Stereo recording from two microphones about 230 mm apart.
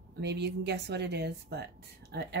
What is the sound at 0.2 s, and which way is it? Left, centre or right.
Speech, right.